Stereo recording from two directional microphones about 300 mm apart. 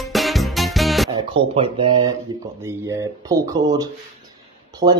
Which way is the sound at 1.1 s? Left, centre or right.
Centre.